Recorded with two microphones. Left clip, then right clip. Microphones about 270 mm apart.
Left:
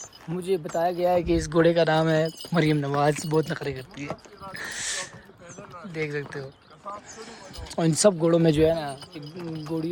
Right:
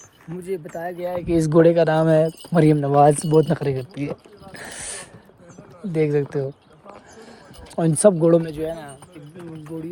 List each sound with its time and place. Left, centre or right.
0.3 s speech: centre
0.9 s speech: left
1.4 s speech: centre
3.4 s speech: centre
5.9 s speech: centre
7.8 s speech: centre
8.5 s speech: left
9.6 s speech: centre